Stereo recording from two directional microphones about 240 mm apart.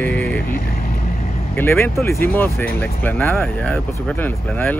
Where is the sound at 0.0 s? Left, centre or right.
Centre.